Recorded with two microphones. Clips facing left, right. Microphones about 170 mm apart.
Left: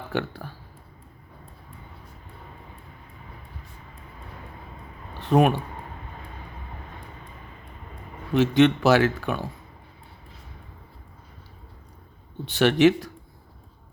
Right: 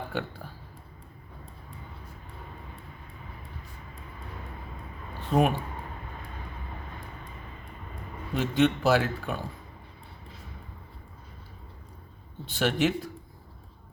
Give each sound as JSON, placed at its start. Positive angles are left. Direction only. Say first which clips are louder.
{"t": 0.1, "sound": "speech", "louder": "left 5 dB", "side_deg": 75}
{"t": 5.2, "sound": "speech", "louder": "left 5 dB", "side_deg": 70}
{"t": 8.3, "sound": "speech", "louder": "left 6 dB", "side_deg": 80}
{"t": 12.5, "sound": "speech", "louder": "left 8 dB", "side_deg": 75}